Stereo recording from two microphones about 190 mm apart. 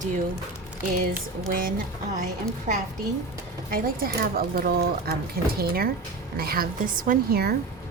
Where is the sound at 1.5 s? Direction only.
50° right (ahead or behind).